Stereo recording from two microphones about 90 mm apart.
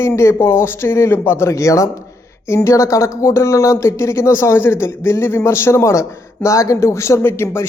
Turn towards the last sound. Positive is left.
turn(degrees=25)  # may be behind; listen again after turning